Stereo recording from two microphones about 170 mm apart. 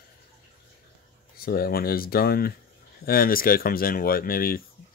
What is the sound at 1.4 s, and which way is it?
Speech, 60° left (ahead or behind).